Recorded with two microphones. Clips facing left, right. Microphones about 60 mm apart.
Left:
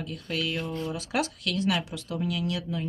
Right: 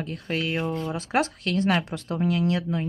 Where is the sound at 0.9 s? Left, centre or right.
Right.